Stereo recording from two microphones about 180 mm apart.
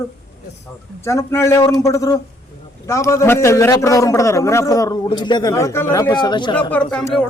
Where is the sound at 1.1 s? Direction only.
15° left (ahead or behind).